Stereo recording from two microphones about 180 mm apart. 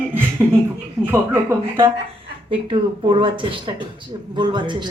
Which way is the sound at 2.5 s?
30° right (ahead or behind).